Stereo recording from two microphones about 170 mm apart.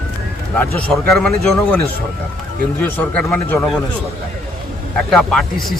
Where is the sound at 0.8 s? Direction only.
Centre (ahead or behind).